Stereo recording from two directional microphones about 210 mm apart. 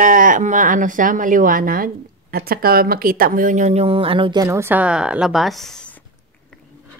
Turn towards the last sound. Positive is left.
turn(degrees=5)  # may be behind; listen again after turning